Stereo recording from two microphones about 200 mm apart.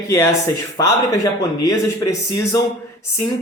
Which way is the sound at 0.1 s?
15° left (ahead or behind).